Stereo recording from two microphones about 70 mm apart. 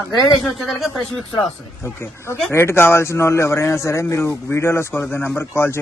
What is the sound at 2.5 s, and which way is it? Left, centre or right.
A man's voice, left.